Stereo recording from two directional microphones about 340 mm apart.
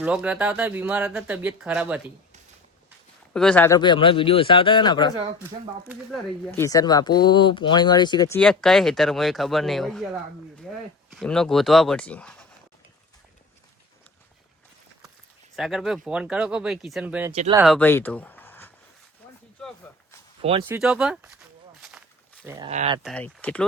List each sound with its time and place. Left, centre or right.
0.0 s speech: centre
3.3 s speech: centre
5.9 s speech: centre
15.5 s speech: centre
17.3 s speech: centre
17.6 s speech: centre
20.4 s speech: centre
20.7 s speech: centre
21.8 s walk: centre
22.4 s speech: centre
23.0 s speech: centre